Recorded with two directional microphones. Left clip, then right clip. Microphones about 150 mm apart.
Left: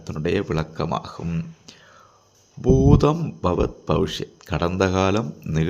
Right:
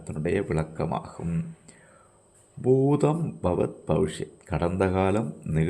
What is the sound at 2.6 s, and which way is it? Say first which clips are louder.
Speech: left 4 dB; 25° left (ahead or behind).